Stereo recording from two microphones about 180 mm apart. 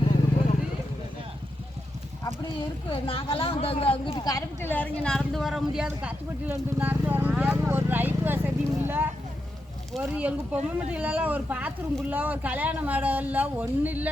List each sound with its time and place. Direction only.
2.9 s speech: 30° left (ahead or behind)
4.1 s speech: 20° left (ahead or behind); by 14.1 s 10° right (ahead or behind)